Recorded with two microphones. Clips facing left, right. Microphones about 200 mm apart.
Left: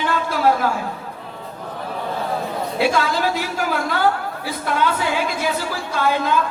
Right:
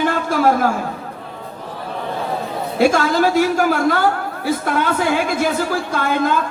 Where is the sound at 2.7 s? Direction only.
45° right (ahead or behind).